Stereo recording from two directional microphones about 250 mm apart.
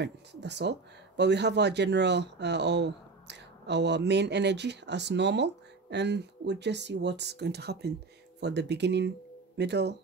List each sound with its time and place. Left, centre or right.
0.0 s speech: right